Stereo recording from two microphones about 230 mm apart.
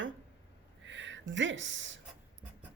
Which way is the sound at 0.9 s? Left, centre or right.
Right.